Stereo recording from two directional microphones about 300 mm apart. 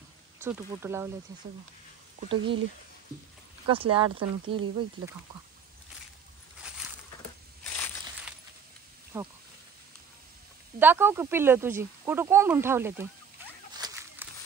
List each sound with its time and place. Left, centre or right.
0.4 s speech: centre
2.2 s speech: centre
3.6 s speech: centre
7.6 s crushing: centre
9.1 s speech: centre
10.8 s speech: centre
13.7 s a sound: centre